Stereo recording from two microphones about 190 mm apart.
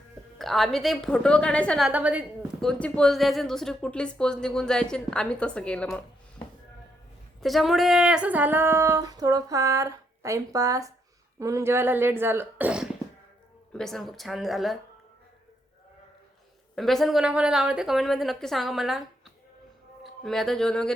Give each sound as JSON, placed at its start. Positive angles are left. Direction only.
{"t": 0.3, "sound": "speech", "side_deg": 0}
{"t": 1.9, "sound": "a woman's voice", "side_deg": -10}
{"t": 2.6, "sound": "speech", "side_deg": 5}
{"t": 7.4, "sound": "speech", "side_deg": 0}
{"t": 16.7, "sound": "speech", "side_deg": 0}
{"t": 20.2, "sound": "speech", "side_deg": 0}